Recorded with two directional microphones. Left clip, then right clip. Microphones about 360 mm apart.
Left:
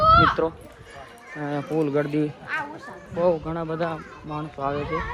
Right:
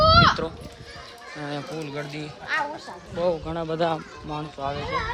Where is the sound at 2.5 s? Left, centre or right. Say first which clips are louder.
Right 6 dB; right.